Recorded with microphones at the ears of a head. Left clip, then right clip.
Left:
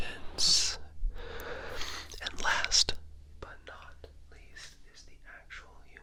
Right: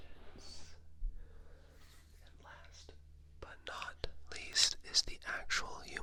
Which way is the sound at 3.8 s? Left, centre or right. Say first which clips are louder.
Right 7 dB; right.